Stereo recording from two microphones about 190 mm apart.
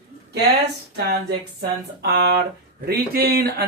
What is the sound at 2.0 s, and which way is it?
Speech, 60° right (ahead or behind).